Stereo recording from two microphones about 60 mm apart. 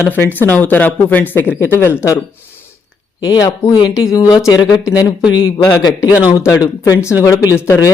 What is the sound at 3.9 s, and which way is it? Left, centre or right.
A man's voice, left.